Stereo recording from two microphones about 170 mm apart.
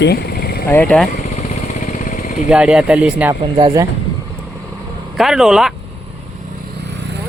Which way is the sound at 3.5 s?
25° right (ahead or behind).